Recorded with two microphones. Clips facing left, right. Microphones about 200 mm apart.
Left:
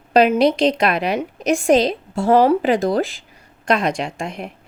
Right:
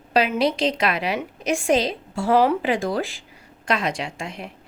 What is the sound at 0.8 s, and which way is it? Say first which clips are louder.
A woman's voice: left 4 dB; 45° left (ahead or behind).